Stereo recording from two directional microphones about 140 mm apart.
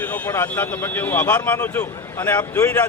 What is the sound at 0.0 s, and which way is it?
Speech, 10° left (ahead or behind).